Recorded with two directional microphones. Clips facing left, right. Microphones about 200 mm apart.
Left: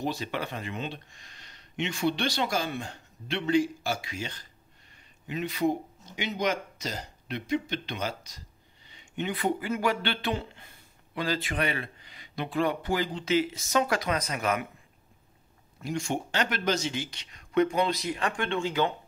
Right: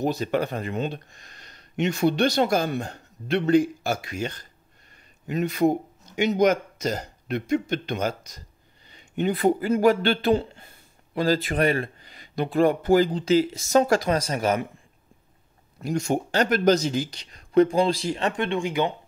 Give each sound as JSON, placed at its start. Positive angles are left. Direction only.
{"t": 0.0, "sound": "a man's voice", "side_deg": -45}
{"t": 15.8, "sound": "a man's voice", "side_deg": -40}